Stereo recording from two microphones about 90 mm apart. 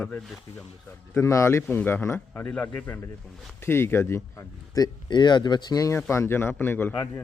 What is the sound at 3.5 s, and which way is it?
Speech, 25° left (ahead or behind).